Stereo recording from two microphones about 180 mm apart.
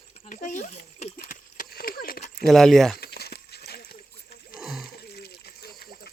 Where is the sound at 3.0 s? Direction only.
60° left (ahead or behind).